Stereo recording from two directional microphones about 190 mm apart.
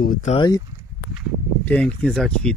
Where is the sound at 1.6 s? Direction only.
5° left (ahead or behind).